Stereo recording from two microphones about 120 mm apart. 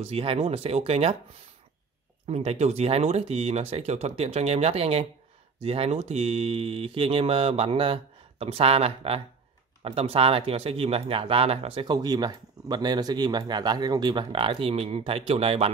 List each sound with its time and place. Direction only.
0.0 s speech: 50° right (ahead or behind)
2.2 s speech: 60° right (ahead or behind)
11.9 s speech: 35° right (ahead or behind); by 15.7 s 55° right (ahead or behind)